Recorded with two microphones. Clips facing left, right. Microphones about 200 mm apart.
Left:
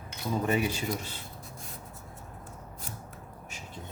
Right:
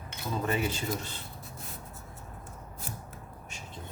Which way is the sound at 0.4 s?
15° left (ahead or behind).